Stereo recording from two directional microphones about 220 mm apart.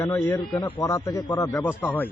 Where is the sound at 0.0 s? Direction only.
15° left (ahead or behind).